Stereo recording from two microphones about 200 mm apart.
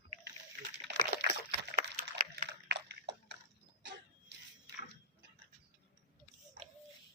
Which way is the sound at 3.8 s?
60° right (ahead or behind).